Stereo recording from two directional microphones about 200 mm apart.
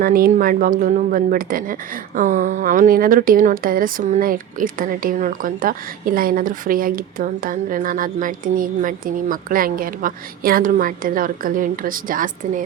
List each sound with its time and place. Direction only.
0.0 s speech: 45° right (ahead or behind)